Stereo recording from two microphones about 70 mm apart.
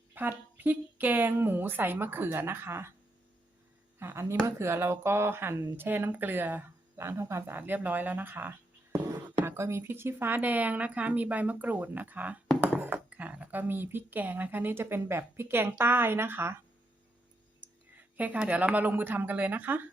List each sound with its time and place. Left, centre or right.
0.1 s speech: right
4.0 s speech: right
17.6 s speech: right